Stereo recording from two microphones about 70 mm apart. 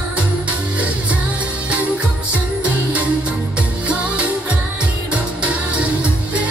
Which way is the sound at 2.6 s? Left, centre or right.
Centre.